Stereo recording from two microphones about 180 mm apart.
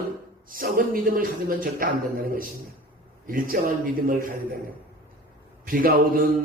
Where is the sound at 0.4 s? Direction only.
50° right (ahead or behind).